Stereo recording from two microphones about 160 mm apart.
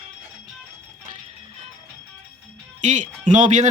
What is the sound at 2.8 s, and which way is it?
Speech, 50° right (ahead or behind).